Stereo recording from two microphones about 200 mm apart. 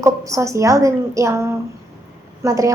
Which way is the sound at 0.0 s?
15° right (ahead or behind).